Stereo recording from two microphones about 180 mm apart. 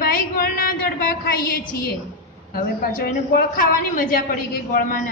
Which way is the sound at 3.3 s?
50° left (ahead or behind).